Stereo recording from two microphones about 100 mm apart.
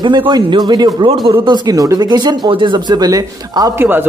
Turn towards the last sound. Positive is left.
turn(degrees=-20)  # may be behind; listen again after turning